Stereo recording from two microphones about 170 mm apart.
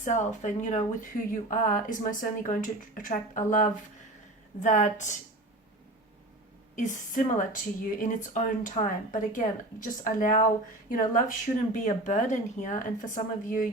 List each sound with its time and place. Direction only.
0.0 s speech: 45° left (ahead or behind)
6.7 s speech: 45° left (ahead or behind)